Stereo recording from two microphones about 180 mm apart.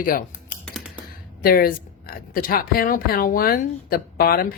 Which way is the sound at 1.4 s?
55° left (ahead or behind).